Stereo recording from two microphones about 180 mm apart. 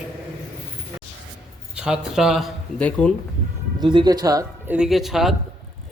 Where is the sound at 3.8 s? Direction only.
25° right (ahead or behind).